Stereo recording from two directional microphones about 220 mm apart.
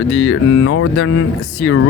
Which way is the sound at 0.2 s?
60° left (ahead or behind).